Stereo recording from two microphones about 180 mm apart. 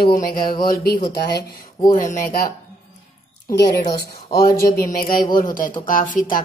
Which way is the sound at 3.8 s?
55° left (ahead or behind).